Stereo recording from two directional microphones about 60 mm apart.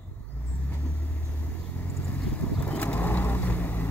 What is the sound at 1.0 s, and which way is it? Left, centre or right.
Vehicle, left.